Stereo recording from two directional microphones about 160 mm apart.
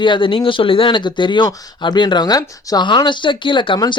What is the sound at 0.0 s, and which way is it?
Speech, 30° left (ahead or behind).